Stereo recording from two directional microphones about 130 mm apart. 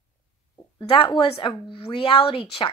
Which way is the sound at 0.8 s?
45° left (ahead or behind).